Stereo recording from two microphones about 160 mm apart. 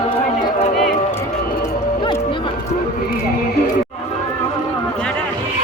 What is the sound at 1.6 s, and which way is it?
Music, 25° left (ahead or behind).